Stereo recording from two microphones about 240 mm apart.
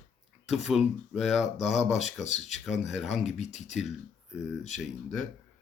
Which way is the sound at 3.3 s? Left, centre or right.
Left.